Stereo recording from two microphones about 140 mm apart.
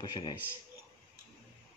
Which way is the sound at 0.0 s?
30° left (ahead or behind).